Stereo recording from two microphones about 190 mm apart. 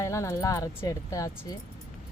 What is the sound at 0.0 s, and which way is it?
Speech, 15° left (ahead or behind).